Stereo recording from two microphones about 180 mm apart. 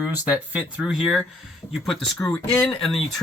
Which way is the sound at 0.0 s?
5° right (ahead or behind).